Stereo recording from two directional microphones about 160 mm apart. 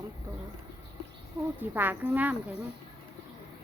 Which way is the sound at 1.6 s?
10° right (ahead or behind).